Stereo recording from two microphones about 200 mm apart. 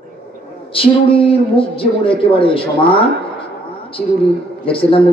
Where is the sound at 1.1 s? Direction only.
25° left (ahead or behind).